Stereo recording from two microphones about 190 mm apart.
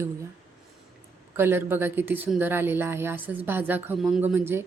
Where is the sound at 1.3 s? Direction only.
10° right (ahead or behind).